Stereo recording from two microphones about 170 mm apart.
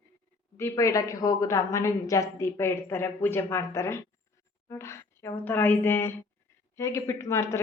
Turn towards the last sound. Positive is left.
turn(degrees=15)  # may be behind; listen again after turning